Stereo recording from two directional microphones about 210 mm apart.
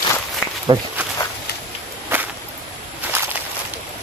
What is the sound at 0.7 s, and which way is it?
Speech, 20° right (ahead or behind).